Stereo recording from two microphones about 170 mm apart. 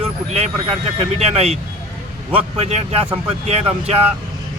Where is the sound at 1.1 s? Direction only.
35° right (ahead or behind).